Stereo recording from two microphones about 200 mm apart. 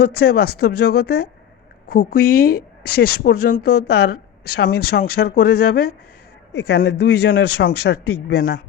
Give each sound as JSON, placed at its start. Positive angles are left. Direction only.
{"t": 0.0, "sound": "speech", "side_deg": 50}